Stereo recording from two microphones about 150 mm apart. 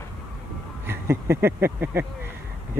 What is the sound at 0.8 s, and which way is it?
Speech, 15° right (ahead or behind).